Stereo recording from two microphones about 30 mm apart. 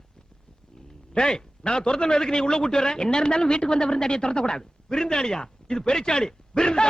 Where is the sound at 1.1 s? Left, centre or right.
Left.